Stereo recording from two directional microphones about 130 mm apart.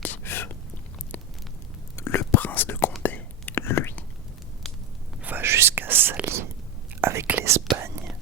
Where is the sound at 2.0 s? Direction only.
20° left (ahead or behind).